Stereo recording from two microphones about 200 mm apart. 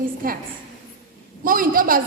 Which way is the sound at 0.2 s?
45° right (ahead or behind).